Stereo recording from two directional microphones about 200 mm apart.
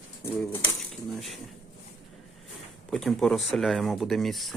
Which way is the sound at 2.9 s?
Centre (ahead or behind).